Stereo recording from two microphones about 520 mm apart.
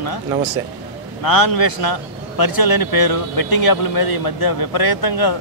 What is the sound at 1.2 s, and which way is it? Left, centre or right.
A man's voice, left.